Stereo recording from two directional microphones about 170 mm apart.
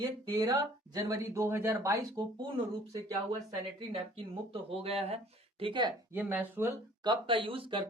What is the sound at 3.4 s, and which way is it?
Speech, 35° right (ahead or behind).